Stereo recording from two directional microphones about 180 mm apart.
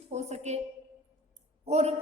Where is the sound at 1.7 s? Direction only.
35° right (ahead or behind).